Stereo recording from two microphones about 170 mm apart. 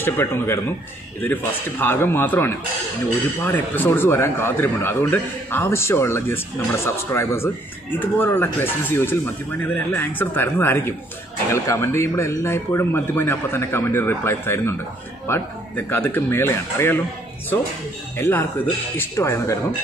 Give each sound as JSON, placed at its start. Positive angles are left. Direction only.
{"t": 0.0, "sound": "a man's voice", "side_deg": 15}
{"t": 18.1, "sound": "a man's voice", "side_deg": 15}